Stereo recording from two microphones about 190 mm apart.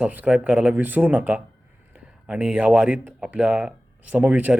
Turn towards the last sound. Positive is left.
turn(degrees=-10)  # may be behind; listen again after turning